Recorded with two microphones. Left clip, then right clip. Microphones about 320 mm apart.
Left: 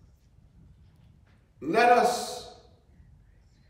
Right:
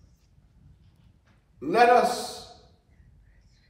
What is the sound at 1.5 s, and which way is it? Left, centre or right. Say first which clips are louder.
Speech: right 2 dB; centre.